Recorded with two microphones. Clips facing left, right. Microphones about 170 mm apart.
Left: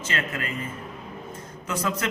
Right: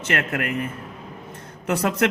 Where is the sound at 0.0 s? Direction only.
65° right (ahead or behind).